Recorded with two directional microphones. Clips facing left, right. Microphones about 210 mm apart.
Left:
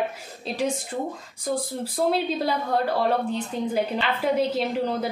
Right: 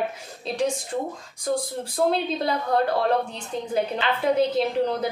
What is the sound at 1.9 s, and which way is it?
Speech, 5° left (ahead or behind).